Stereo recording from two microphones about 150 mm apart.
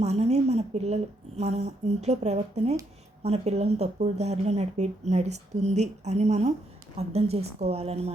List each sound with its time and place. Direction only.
0.0 s speech: 45° right (ahead or behind)